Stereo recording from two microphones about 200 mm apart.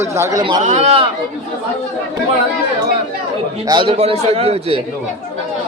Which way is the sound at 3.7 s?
25° right (ahead or behind).